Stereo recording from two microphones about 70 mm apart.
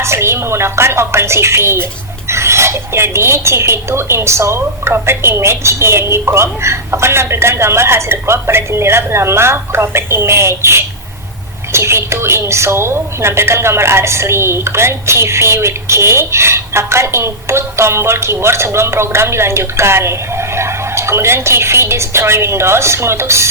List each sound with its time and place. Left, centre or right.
0.0 s a woman's voice: right